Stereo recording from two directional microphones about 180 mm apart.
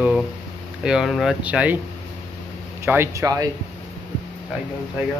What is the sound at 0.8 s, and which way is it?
Speech, centre (ahead or behind).